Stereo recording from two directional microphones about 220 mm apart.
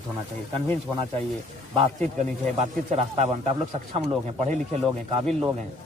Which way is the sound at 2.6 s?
30° right (ahead or behind).